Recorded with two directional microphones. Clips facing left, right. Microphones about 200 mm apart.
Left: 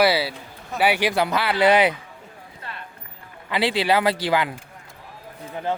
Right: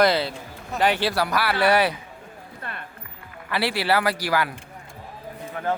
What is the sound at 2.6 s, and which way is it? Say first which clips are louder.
Music: right 2 dB; 55° right (ahead or behind).